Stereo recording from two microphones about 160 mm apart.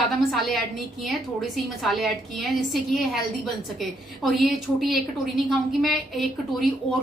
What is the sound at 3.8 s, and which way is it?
A woman's voice, centre (ahead or behind).